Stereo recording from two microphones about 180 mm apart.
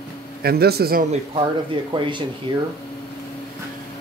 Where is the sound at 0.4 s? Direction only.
60° right (ahead or behind).